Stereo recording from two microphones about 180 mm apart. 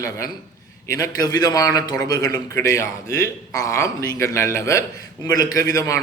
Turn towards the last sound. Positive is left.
turn(degrees=20)  # may be behind; listen again after turning